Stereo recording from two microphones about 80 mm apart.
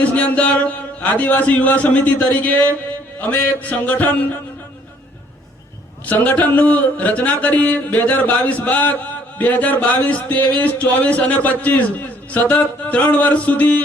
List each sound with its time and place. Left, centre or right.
0.0 s a man's voice: centre
6.1 s a man's voice: centre